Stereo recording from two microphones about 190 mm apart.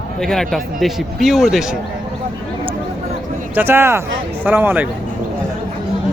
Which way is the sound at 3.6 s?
10° right (ahead or behind).